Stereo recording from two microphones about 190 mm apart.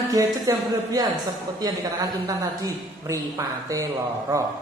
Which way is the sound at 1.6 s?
20° right (ahead or behind).